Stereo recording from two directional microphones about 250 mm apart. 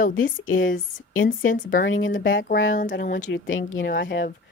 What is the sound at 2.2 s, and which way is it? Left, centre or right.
Speech, left.